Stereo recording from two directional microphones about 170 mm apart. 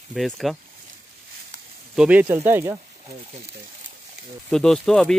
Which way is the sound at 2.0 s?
10° right (ahead or behind).